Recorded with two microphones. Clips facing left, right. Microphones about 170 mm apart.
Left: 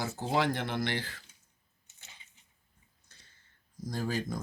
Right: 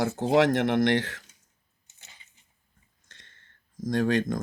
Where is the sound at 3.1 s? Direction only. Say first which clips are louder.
Right 7 dB; 90° right.